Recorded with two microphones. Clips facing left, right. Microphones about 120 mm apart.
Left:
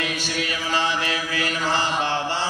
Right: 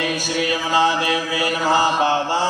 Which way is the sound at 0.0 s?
15° right (ahead or behind).